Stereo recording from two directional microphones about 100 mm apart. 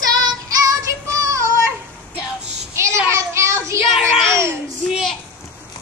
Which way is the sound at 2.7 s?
30° right (ahead or behind).